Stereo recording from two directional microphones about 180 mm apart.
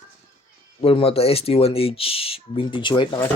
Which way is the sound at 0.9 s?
30° left (ahead or behind).